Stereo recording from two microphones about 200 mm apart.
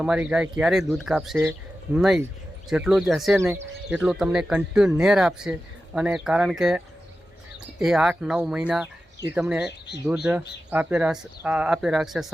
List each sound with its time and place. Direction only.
0.0 s speech: 5° right (ahead or behind)
3.3 s speech: 10° right (ahead or behind)
9.6 s speech: 60° left (ahead or behind)
10.3 s speech: 10° right (ahead or behind)